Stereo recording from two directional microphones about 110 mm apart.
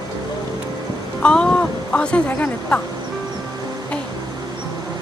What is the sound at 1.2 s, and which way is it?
Speech, 10° left (ahead or behind).